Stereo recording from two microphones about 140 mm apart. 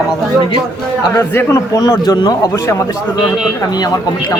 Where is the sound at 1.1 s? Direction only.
20° left (ahead or behind).